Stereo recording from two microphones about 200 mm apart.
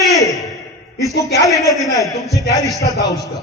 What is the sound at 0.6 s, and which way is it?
A man's voice, 15° left (ahead or behind).